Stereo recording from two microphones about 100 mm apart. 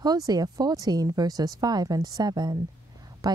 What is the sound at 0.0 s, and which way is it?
A woman's voice, 40° right (ahead or behind).